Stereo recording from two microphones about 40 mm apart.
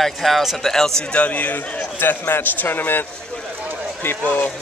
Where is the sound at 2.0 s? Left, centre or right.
Left.